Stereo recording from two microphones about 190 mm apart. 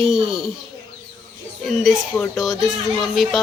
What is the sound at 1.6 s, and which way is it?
Speech, centre (ahead or behind).